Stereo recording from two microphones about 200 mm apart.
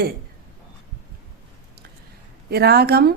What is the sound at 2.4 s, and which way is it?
Speech, 50° right (ahead or behind).